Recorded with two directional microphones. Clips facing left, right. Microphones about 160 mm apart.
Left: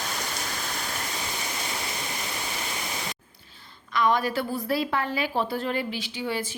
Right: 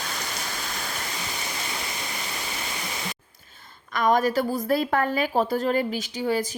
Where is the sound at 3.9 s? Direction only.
45° right (ahead or behind).